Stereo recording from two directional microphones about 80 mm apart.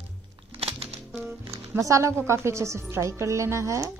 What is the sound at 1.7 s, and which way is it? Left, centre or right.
Speech, right.